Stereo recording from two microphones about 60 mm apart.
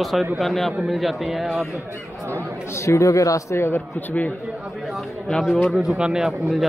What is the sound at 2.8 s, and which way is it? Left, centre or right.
Speech, left.